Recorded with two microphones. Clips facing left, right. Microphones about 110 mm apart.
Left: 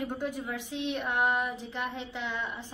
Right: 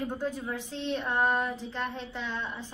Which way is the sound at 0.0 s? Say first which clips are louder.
Right 1 dB; 15° left (ahead or behind).